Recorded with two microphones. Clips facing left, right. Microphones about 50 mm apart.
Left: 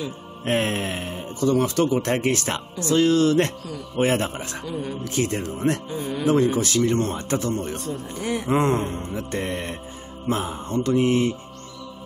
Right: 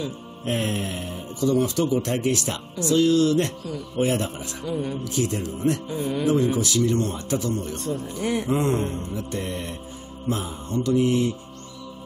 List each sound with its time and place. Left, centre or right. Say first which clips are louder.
0.5 s speech: left 3 dB; left
4.6 s speech: right 4 dB; centre
5.0 s a man's voice: left 1 dB; left
7.7 s speech: right 1 dB; centre
8.5 s a man's voice: left 6 dB; left
9.3 s speech: left 5 dB; left